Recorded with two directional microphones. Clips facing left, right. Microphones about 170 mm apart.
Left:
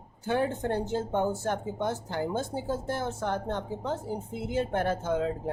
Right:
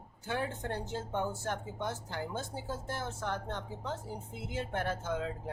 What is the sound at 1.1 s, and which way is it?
Speech, 50° left (ahead or behind).